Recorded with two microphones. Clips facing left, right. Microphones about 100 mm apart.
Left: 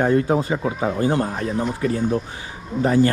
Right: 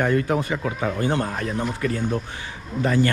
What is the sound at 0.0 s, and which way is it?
A man's voice, 30° left (ahead or behind).